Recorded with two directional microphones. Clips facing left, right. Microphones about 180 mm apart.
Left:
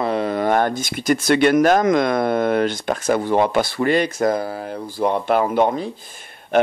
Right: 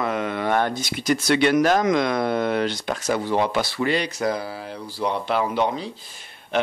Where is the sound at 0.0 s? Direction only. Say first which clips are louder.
Left 4 dB; 35° left (ahead or behind).